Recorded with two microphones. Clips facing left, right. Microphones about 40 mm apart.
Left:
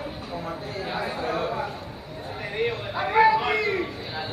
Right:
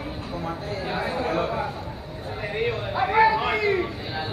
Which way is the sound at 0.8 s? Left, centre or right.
Centre.